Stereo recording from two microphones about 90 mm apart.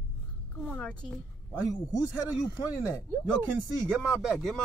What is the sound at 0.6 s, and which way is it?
Speech, 15° left (ahead or behind).